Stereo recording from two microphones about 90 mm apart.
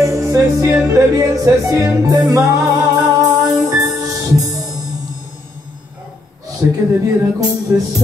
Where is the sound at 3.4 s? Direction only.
40° right (ahead or behind).